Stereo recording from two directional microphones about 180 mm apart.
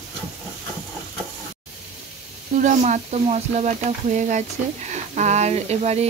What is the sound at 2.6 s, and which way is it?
Speech, 40° right (ahead or behind).